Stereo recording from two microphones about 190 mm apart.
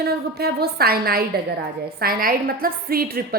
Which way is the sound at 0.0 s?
55° right (ahead or behind).